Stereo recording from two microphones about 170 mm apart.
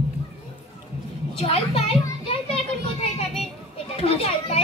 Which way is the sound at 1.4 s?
35° left (ahead or behind).